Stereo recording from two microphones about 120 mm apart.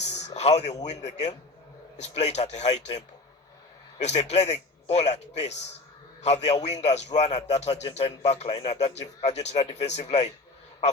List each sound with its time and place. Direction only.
0.0 s a sound: 70° left (ahead or behind)
0.9 s a man's voice: 70° left (ahead or behind)
3.9 s a man's voice: 65° left (ahead or behind)